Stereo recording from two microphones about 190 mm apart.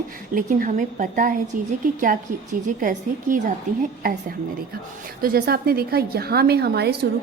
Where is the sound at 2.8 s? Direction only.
45° right (ahead or behind).